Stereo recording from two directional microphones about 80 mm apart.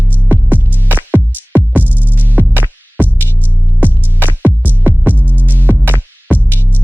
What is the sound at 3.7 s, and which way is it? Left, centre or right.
Music, right.